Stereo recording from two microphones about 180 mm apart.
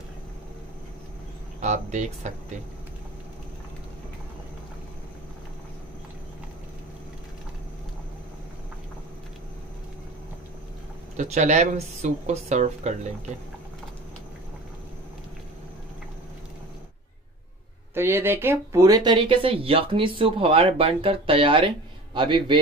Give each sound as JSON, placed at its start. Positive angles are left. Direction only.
{"t": 1.6, "sound": "speech", "side_deg": -40}
{"t": 11.1, "sound": "speech", "side_deg": -40}
{"t": 17.9, "sound": "speech", "side_deg": -15}